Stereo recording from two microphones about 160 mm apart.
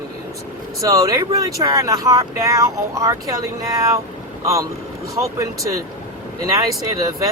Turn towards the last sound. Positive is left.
turn(degrees=-20)  # may be behind; listen again after turning